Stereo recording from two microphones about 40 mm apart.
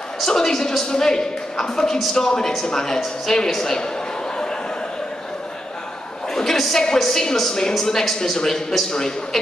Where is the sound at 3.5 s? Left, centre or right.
Centre.